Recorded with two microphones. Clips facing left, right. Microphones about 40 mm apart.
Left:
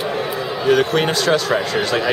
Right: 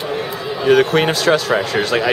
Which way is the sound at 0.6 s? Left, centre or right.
Centre.